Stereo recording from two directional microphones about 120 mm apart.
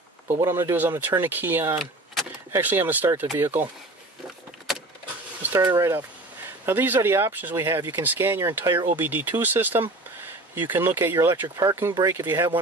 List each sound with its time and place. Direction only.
0.3 s speech: 20° right (ahead or behind)
5.5 s speech: 30° right (ahead or behind)